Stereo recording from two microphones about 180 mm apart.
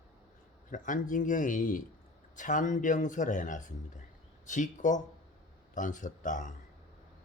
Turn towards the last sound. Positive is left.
turn(degrees=45)  # may be behind; listen again after turning